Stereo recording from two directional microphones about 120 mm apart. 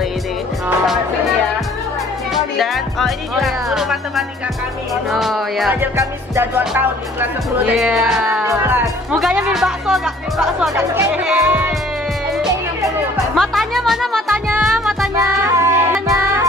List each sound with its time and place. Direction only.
2.3 s speech: centre (ahead or behind)
5.1 s speech: centre (ahead or behind)
5.9 s music: 20° right (ahead or behind)
6.8 s speech: 15° right (ahead or behind)
7.7 s speech: centre (ahead or behind)
8.3 s speech: 20° right (ahead or behind)
9.2 s speech: 5° right (ahead or behind)
13.4 s speech: centre (ahead or behind)
14.6 s music: centre (ahead or behind)
15.1 s child singing: 25° right (ahead or behind)